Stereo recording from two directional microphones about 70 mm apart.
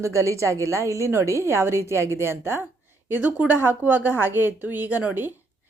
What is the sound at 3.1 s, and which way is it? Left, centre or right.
A woman's voice, right.